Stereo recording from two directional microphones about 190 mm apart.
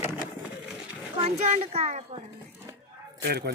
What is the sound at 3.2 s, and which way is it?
Speech, 60° right (ahead or behind).